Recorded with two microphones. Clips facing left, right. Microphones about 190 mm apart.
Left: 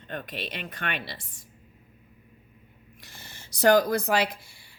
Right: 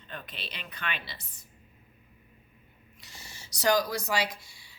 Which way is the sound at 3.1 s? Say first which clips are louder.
Left 1 dB; 55° left (ahead or behind).